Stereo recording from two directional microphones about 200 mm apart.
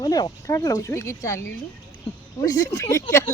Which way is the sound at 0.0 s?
20° left (ahead or behind).